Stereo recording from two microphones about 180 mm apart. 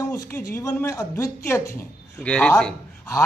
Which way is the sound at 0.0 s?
15° left (ahead or behind).